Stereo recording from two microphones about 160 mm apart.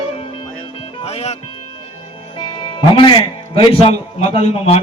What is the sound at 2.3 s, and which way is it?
A man's voice, 30° left (ahead or behind).